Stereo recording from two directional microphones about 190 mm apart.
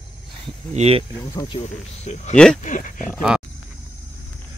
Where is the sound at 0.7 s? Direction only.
35° right (ahead or behind).